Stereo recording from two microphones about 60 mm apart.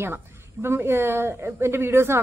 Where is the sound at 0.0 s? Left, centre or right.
Right.